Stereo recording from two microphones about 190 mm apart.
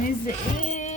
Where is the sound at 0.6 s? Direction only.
45° left (ahead or behind).